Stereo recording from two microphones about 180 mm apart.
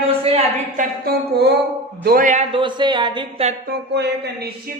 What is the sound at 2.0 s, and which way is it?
Speech, 50° right (ahead or behind).